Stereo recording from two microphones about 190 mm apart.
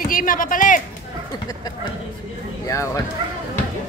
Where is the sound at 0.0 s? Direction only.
45° left (ahead or behind).